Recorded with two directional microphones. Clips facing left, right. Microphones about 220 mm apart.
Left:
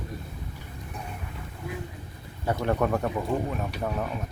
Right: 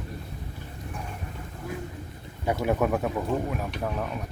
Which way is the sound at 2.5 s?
5° right (ahead or behind).